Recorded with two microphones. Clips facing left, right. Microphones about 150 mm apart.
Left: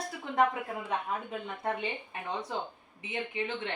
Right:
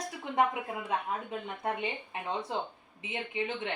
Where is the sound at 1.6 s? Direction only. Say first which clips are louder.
Even; 20° right (ahead or behind).